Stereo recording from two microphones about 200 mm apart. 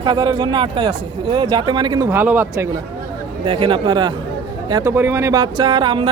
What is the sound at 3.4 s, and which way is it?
Speech, 25° right (ahead or behind).